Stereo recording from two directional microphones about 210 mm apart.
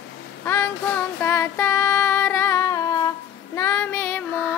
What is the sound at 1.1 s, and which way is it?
Female singing, 10° left (ahead or behind).